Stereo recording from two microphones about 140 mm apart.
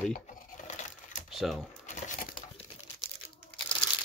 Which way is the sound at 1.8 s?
60° left (ahead or behind).